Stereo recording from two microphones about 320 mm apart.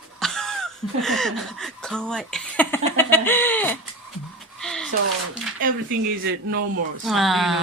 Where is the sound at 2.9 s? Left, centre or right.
Centre.